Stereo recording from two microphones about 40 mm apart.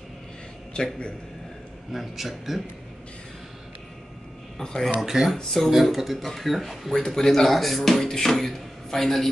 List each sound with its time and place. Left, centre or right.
0.8 s a man's voice: left
1.9 s speech: centre
4.6 s speech: centre
5.0 s speech: centre
5.4 s speech: centre
5.7 s speech: centre
6.9 s speech: centre